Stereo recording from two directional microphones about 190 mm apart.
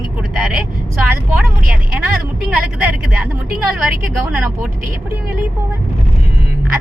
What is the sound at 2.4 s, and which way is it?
A woman's voice, 5° right (ahead or behind).